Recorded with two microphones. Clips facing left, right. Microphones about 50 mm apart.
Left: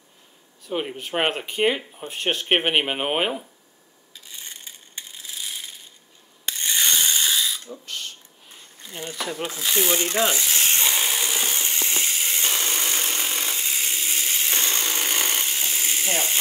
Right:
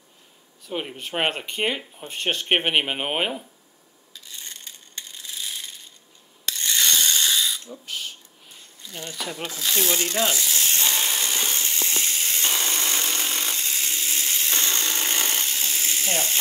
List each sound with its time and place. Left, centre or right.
0.7 s speech: centre
4.1 s coin: centre
6.4 s ratchet: left
7.8 s camera: centre
9.1 s speech: centre
9.5 s rub: centre
10.9 s a sound: centre